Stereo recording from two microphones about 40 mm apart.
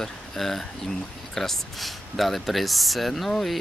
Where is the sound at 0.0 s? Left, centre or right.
Centre.